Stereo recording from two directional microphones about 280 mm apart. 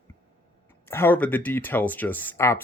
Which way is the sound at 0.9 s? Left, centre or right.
Centre.